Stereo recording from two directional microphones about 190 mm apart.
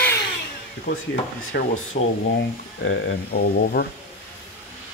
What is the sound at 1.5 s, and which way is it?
Speech, 65° left (ahead or behind).